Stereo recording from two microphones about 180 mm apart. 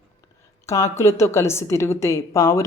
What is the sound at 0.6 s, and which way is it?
A woman's voice, 15° left (ahead or behind).